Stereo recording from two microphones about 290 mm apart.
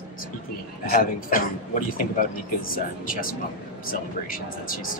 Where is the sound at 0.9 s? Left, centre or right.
Left.